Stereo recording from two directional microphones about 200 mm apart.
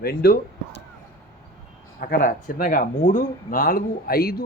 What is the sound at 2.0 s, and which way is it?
Speech, 50° left (ahead or behind).